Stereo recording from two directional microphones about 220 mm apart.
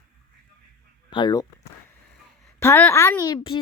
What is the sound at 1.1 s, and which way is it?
A child's voice, 20° left (ahead or behind).